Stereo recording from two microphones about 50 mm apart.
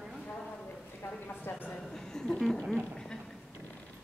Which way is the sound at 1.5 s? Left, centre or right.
Left.